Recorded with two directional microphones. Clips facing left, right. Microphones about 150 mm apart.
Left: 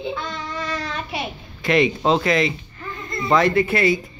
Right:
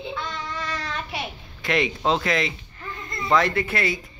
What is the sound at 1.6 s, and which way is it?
Speech, 5° left (ahead or behind).